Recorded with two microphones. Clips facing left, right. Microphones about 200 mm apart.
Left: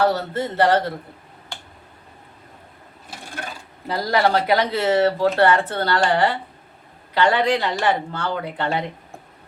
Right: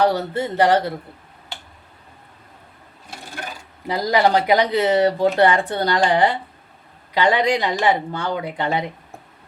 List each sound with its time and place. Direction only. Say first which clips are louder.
0.0 s speech: right 1 dB; 15° right (ahead or behind)
3.8 s speech: right 2 dB; 15° right (ahead or behind)